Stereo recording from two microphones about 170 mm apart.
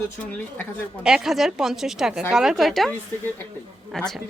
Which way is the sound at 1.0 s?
5° right (ahead or behind).